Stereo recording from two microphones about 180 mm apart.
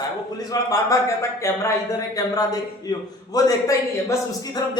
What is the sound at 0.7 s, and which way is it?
A man's voice, 15° left (ahead or behind).